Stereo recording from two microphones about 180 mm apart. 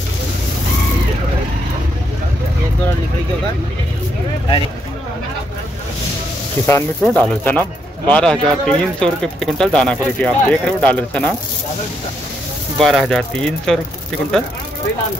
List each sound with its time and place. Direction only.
6.6 s speech: 10° left (ahead or behind)
12.7 s speech: centre (ahead or behind)